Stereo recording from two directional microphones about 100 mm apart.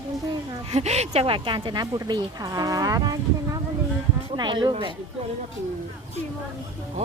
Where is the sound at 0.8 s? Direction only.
90° right; by 1.9 s 50° right (ahead or behind).